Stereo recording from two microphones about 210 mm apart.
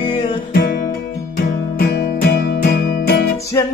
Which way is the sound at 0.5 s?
45° left (ahead or behind).